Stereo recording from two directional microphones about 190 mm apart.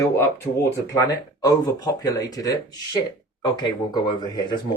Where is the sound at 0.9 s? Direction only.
20° left (ahead or behind).